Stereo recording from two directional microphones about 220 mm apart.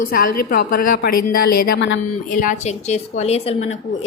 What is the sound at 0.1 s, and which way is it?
A woman's voice, 40° left (ahead or behind).